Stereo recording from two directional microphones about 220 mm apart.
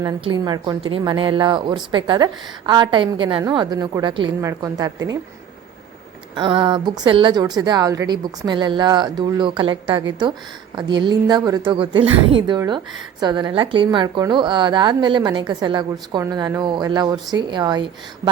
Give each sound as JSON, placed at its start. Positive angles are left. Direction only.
{"t": 0.0, "sound": "a woman's voice", "side_deg": -15}
{"t": 6.3, "sound": "a woman's voice", "side_deg": -20}